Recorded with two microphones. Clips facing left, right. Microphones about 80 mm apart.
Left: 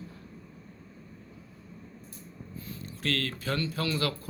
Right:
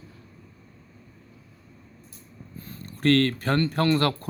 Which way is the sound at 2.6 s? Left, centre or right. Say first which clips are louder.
Right 11 dB; right.